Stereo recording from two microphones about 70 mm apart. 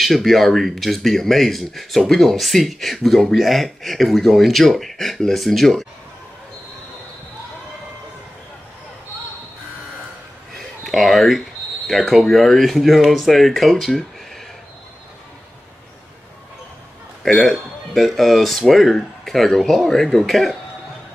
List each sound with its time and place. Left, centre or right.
0.0 s speech: centre
10.8 s speech: centre
17.2 s speech: centre